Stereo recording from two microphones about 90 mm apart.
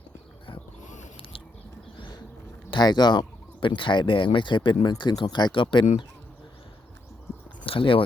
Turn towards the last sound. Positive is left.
turn(degrees=80)